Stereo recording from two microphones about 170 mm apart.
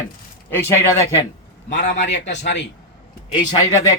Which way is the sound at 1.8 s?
90° left.